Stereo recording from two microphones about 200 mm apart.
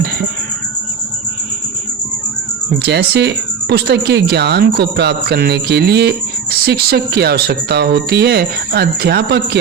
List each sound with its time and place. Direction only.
2.7 s speech: 55° right (ahead or behind)